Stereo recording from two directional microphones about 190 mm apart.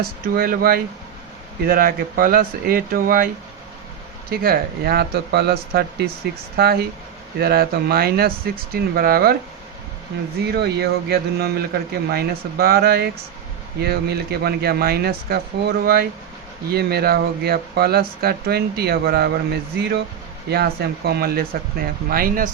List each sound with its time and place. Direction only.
0.3 s speech: 50° right (ahead or behind)
4.3 s speech: 55° right (ahead or behind)
10.4 s speech: 55° right (ahead or behind)